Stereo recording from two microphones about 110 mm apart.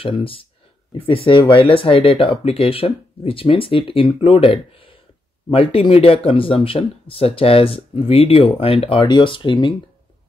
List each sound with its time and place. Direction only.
0.0 s speech: 55° left (ahead or behind)
9.0 s speech: 45° left (ahead or behind)